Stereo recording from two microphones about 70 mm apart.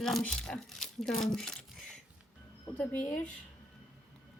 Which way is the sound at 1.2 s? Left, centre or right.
Centre.